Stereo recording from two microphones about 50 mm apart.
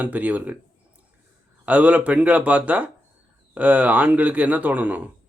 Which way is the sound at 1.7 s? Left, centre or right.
Right.